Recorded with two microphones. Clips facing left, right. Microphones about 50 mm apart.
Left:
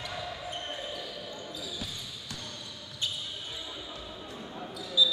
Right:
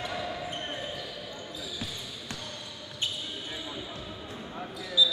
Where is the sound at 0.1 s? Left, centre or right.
Centre.